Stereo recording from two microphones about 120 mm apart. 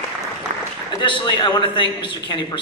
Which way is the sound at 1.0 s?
40° left (ahead or behind).